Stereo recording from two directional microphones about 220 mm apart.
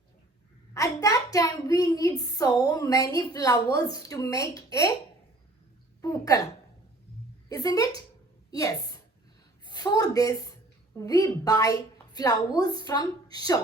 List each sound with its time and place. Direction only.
0.7 s a woman's voice: 15° left (ahead or behind)
6.0 s a woman's voice: 15° left (ahead or behind)
7.5 s a woman's voice: 15° left (ahead or behind)